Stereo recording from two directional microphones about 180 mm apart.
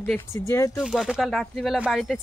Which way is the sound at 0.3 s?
15° left (ahead or behind).